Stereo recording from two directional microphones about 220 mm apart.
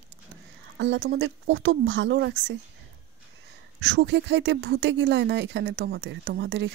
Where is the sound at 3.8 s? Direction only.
50° right (ahead or behind).